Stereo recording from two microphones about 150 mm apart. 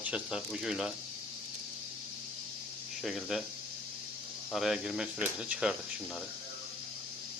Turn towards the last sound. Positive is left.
turn(degrees=-5)  # may be behind; listen again after turning